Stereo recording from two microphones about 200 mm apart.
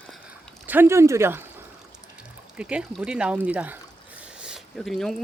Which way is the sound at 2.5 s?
5° right (ahead or behind).